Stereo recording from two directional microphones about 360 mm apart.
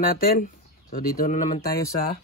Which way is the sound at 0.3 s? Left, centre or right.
Left.